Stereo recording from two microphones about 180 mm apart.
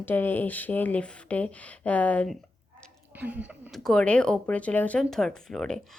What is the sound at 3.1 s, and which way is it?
Speech, 10° right (ahead or behind).